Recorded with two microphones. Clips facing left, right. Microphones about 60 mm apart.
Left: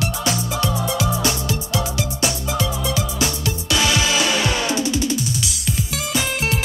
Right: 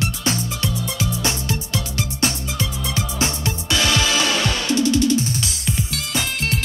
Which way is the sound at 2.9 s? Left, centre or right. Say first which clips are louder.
Left 1 dB; right.